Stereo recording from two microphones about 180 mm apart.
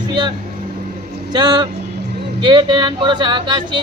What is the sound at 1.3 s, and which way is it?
Music, 25° right (ahead or behind).